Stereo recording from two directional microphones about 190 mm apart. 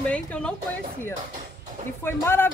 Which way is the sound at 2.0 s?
10° left (ahead or behind).